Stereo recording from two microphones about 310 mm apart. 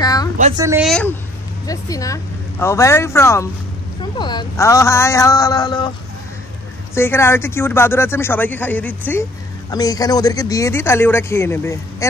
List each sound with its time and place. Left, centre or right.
0.0 s a sound: centre
0.6 s speech: centre
7.0 s speech: centre